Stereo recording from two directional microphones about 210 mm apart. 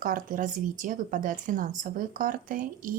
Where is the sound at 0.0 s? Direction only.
40° right (ahead or behind).